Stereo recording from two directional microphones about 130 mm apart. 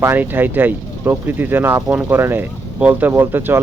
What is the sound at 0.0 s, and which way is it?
A man's voice, 15° right (ahead or behind).